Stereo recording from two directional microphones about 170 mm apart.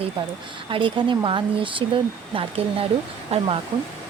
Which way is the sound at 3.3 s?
35° right (ahead or behind).